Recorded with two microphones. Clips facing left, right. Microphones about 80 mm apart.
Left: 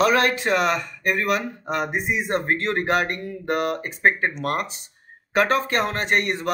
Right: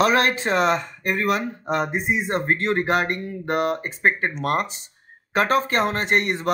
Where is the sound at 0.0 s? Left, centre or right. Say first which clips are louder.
Even; right.